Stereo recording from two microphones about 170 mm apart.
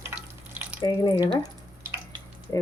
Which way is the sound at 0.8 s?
25° left (ahead or behind).